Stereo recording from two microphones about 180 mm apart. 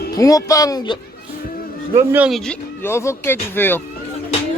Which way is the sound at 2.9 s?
15° left (ahead or behind).